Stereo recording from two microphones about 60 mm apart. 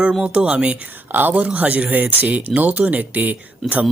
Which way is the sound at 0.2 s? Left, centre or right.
Centre.